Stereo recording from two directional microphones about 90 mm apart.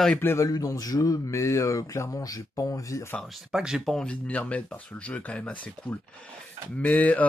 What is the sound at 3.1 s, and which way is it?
Speech, centre (ahead or behind).